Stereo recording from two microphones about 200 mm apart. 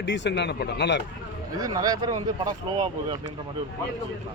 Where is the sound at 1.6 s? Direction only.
20° right (ahead or behind).